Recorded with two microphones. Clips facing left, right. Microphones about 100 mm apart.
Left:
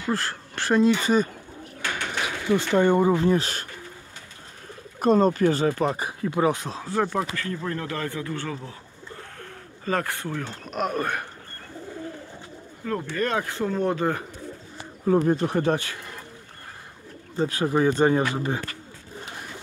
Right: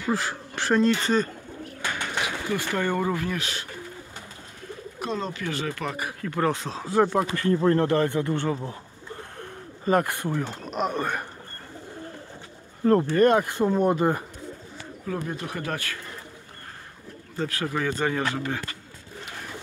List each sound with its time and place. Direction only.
0.1 s speech: 5° right (ahead or behind)
2.5 s speech: 25° left (ahead or behind)
4.9 s speech: 45° left (ahead or behind); by 6.5 s 15° left (ahead or behind)
6.5 s speech: centre (ahead or behind)
7.3 s speech: 30° right (ahead or behind)
9.4 s bird: 20° right (ahead or behind)
10.4 s speech: 5° right (ahead or behind)
12.8 s speech: 40° right (ahead or behind)
13.4 s speech: 15° right (ahead or behind)
15.0 s speech: 35° left (ahead or behind)
17.4 s speech: 20° left (ahead or behind)